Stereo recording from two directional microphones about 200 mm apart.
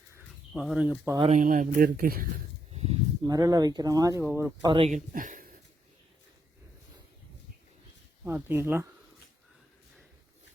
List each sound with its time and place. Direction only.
0.5 s speech: 5° right (ahead or behind)
1.2 s speech: 40° right (ahead or behind)
2.7 s a sound: 30° right (ahead or behind)
3.2 s speech: 15° right (ahead or behind)
4.6 s speech: 25° right (ahead or behind)
4.9 s speech: 40° right (ahead or behind)
8.2 s speech: 10° right (ahead or behind)